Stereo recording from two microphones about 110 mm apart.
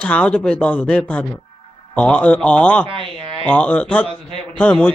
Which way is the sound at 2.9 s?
55° right (ahead or behind).